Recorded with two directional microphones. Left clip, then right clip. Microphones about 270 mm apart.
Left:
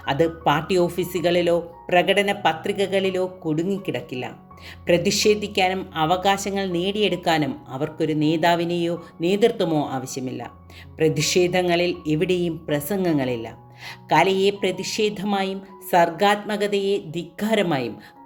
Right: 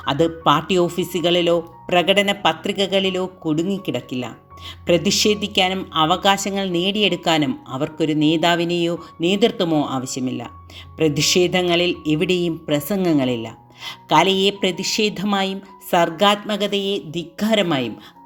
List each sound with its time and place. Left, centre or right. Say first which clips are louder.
0.0 s speech: right 3 dB; centre